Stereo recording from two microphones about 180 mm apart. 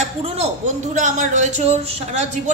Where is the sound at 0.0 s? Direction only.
35° right (ahead or behind).